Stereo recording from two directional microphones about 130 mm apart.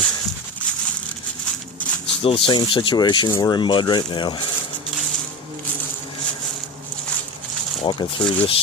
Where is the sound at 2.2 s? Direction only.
45° left (ahead or behind).